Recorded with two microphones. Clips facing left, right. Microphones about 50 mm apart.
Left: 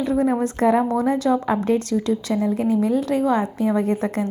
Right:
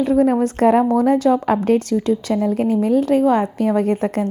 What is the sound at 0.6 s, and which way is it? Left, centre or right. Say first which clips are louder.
A woman's voice: right 4 dB; right.